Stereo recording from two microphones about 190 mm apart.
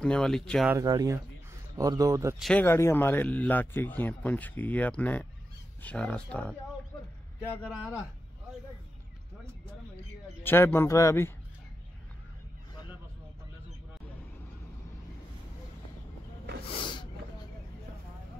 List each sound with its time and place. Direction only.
0.0 s speech: 5° left (ahead or behind)
0.7 s speech: 20° right (ahead or behind)
2.3 s speech: centre (ahead or behind)
2.6 s speech: 10° left (ahead or behind)
7.6 s speech: centre (ahead or behind)
10.4 s speech: 10° left (ahead or behind)
16.6 s a sound: 25° left (ahead or behind)